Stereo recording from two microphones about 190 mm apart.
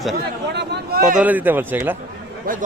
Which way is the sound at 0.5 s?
60° right (ahead or behind).